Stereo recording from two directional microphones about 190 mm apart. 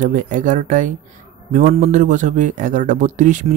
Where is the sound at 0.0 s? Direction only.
45° right (ahead or behind).